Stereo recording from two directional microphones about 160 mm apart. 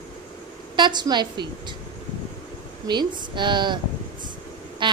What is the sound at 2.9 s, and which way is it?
A woman's voice, 30° right (ahead or behind).